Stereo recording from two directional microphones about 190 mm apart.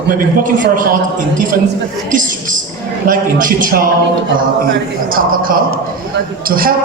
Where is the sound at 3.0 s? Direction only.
45° right (ahead or behind).